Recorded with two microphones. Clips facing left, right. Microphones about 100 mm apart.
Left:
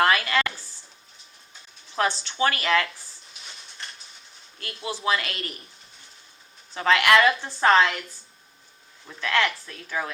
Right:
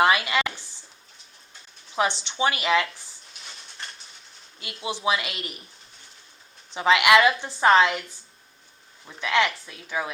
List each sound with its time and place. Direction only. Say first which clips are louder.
0.0 s a sound: right 1 dB; 15° right (ahead or behind)
2.0 s speech: even; 20° right (ahead or behind)
4.6 s speech: right 1 dB; 15° right (ahead or behind)
6.7 s speech: right 1 dB; 15° right (ahead or behind)
7.1 s a woman's voice: right 1 dB; centre (ahead or behind)
7.6 s speech: right 1 dB; 15° right (ahead or behind)
9.0 s speech: right 1 dB; 10° right (ahead or behind)